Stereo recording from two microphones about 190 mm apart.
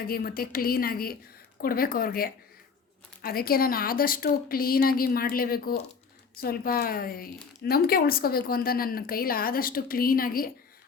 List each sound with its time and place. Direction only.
0.0 s a woman's voice: 50° left (ahead or behind)